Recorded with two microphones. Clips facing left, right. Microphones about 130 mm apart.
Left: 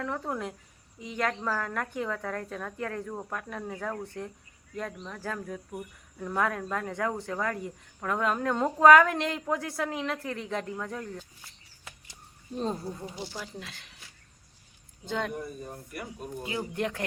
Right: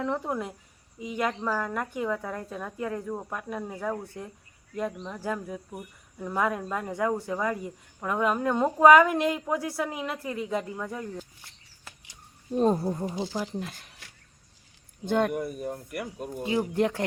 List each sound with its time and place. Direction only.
0.3 s speech: 5° right (ahead or behind)
12.5 s speech: 50° right (ahead or behind)
15.0 s speech: 55° right (ahead or behind); by 16.3 s 75° right (ahead or behind)
16.4 s speech: 30° right (ahead or behind)